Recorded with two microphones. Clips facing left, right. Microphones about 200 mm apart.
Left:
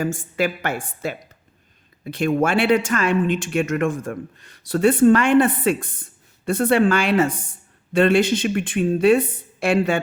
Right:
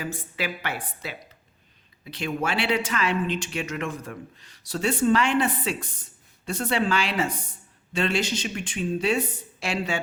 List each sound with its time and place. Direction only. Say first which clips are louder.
0.0 s speech: left 9 dB; 45° left (ahead or behind)